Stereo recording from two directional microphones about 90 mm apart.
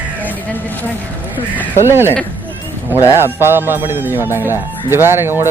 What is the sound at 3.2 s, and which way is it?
Speech, 25° right (ahead or behind).